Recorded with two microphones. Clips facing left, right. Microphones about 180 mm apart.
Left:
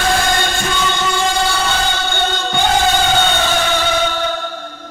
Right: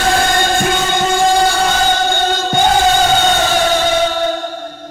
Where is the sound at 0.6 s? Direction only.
50° right (ahead or behind).